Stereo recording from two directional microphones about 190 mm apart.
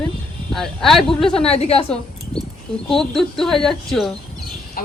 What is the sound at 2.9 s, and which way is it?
Speech, centre (ahead or behind).